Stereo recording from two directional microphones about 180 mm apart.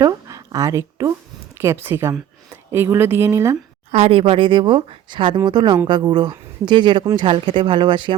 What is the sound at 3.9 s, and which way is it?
Speech, 35° right (ahead or behind).